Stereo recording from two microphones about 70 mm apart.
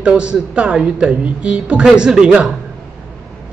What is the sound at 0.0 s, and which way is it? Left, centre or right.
Speech, centre.